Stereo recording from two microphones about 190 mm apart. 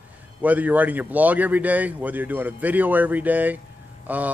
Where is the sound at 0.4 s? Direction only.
10° right (ahead or behind).